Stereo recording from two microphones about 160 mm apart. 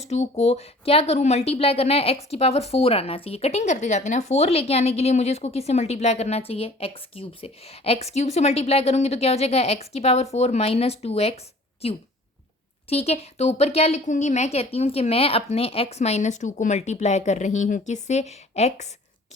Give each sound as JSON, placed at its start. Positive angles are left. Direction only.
{"t": 0.1, "sound": "a woman's voice", "side_deg": 45}